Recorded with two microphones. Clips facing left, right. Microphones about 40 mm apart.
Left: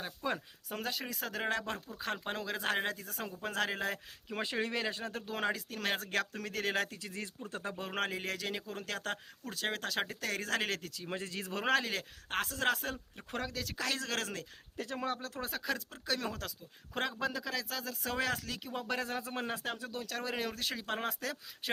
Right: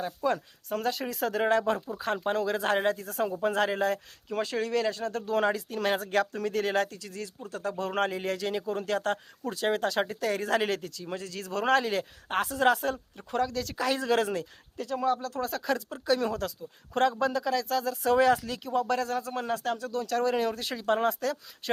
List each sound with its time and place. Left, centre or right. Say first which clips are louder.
0.0 s speech: right 8 dB; centre
3.9 s speech: right 8 dB; centre
4.4 s speech: right 6 dB; left
5.4 s speech: right 7 dB; centre
6.8 s speech: right 4 dB; centre
7.9 s speech: right 7 dB; centre
10.9 s speech: right 3 dB; left
11.6 s speech: right 7 dB; centre
13.1 s speech: right 9 dB; centre
13.7 s speech: right 10 dB; centre
14.8 s speech: right 9 dB; left
15.4 s speech: right 6 dB; centre
15.7 s speech: right 10 dB; centre
18.7 s speech: right 9 dB; centre